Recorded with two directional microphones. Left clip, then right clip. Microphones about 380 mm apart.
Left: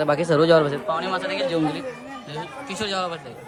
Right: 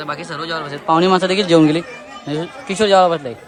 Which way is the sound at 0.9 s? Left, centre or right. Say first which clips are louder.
Right 10 dB; centre.